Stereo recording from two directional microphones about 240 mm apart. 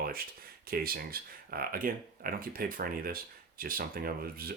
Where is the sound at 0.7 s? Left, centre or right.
Right.